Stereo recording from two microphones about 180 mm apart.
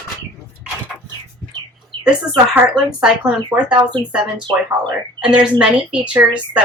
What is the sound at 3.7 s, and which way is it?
Speech, 25° right (ahead or behind).